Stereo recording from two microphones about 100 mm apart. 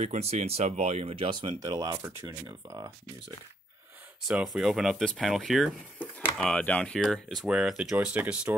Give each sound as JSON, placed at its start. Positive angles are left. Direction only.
{"t": 0.0, "sound": "speech", "side_deg": -90}
{"t": 1.6, "sound": "speech", "side_deg": -35}
{"t": 4.3, "sound": "speech", "side_deg": -5}
{"t": 5.9, "sound": "speech", "side_deg": 10}